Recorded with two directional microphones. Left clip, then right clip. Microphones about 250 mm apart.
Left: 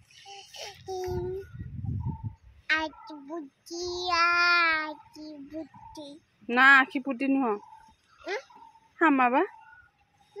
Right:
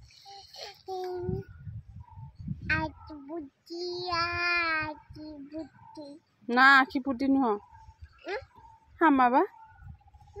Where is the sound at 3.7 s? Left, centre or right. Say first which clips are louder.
Left 2 dB; centre.